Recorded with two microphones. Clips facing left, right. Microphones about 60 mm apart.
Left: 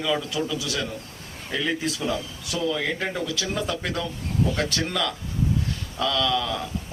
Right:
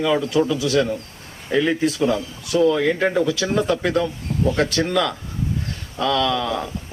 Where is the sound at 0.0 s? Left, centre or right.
Right.